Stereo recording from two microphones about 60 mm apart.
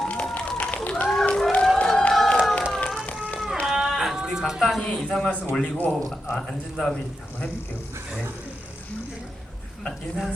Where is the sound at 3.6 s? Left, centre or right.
Centre.